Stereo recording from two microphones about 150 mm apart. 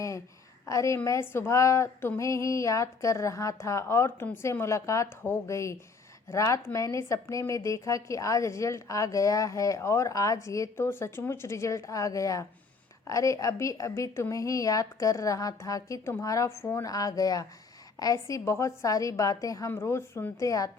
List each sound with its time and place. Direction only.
0.6 s a woman's voice: 20° left (ahead or behind)